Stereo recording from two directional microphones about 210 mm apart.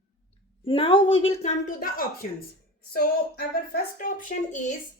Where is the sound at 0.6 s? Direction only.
25° left (ahead or behind); by 4.1 s 45° left (ahead or behind).